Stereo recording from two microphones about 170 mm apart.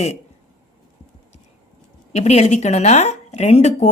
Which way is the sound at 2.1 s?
40° left (ahead or behind).